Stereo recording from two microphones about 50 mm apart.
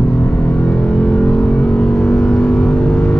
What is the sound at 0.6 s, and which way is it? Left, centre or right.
Vehicle, left.